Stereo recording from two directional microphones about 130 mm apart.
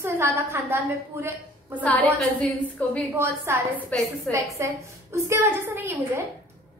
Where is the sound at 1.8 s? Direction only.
10° left (ahead or behind).